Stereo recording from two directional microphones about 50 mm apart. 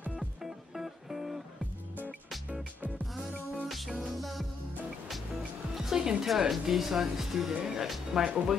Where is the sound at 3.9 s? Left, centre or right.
Centre.